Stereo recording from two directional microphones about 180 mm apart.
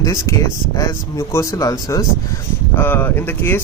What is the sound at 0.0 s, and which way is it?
Speech, 15° left (ahead or behind).